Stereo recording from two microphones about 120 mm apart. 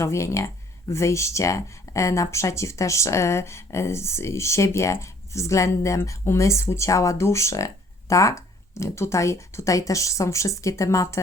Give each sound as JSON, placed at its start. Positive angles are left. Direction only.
{"t": 0.0, "sound": "speech", "side_deg": 25}